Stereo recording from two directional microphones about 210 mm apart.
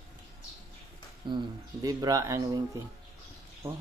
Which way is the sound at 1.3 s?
20° right (ahead or behind).